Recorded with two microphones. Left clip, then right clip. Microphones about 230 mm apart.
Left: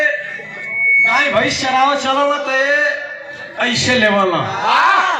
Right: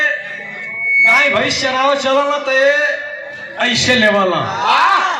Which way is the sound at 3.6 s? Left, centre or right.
Right.